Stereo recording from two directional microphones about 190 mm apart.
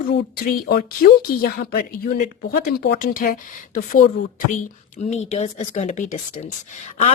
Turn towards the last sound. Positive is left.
turn(degrees=35)  # may be behind; listen again after turning